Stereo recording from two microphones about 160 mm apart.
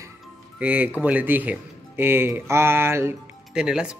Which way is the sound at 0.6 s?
10° right (ahead or behind).